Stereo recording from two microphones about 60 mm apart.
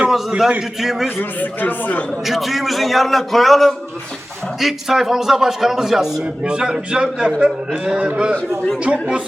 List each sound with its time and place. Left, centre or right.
0.1 s a man's voice: centre
1.2 s speech: left
2.2 s a man's voice: centre